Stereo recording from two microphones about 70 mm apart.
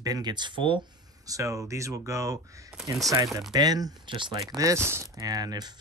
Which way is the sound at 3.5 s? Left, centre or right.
Right.